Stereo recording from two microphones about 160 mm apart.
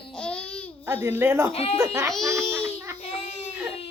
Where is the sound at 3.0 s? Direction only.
40° left (ahead or behind).